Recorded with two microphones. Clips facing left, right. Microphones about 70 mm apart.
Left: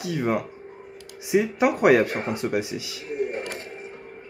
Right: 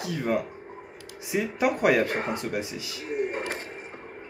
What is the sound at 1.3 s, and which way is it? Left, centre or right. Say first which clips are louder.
Speech: left 5 dB; centre.